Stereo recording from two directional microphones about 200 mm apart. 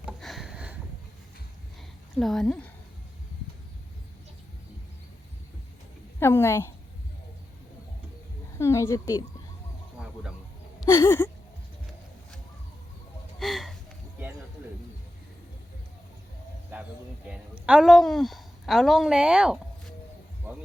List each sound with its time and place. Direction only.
0.0 s sniff: centre (ahead or behind)
2.1 s a woman's voice: centre (ahead or behind)
6.1 s a woman's voice: 10° left (ahead or behind)
8.5 s a woman's voice: 15° left (ahead or behind)
10.8 s a sound: 15° left (ahead or behind)
13.4 s a sound: centre (ahead or behind)
17.7 s a woman's voice: 5° right (ahead or behind)